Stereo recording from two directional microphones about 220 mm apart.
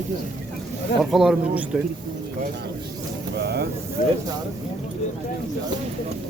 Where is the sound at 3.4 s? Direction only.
50° right (ahead or behind).